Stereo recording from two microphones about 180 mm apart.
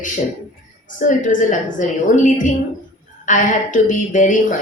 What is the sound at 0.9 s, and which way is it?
A woman's voice, 45° left (ahead or behind).